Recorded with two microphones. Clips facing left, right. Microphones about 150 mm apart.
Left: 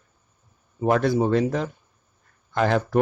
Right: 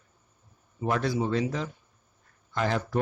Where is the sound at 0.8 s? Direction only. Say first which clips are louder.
Left 7 dB; 55° left (ahead or behind).